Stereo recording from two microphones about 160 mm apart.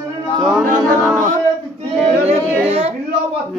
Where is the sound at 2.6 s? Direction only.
40° right (ahead or behind).